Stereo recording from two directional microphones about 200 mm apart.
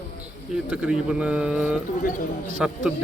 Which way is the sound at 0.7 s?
5° right (ahead or behind).